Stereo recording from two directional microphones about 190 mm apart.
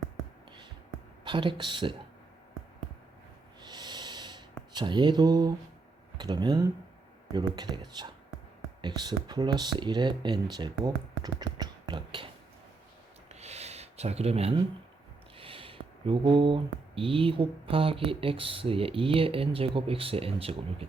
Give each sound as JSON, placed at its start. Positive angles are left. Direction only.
{"t": 1.2, "sound": "speech", "side_deg": -25}
{"t": 3.6, "sound": "snort", "side_deg": -25}
{"t": 4.7, "sound": "speech", "side_deg": -25}
{"t": 13.2, "sound": "a sound", "side_deg": -35}
{"t": 15.4, "sound": "speech", "side_deg": -30}